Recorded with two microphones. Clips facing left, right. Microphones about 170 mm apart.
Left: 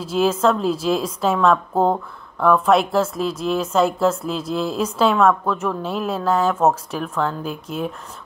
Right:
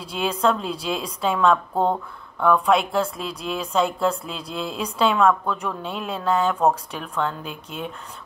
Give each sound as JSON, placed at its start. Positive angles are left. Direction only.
{"t": 0.0, "sound": "speech", "side_deg": 5}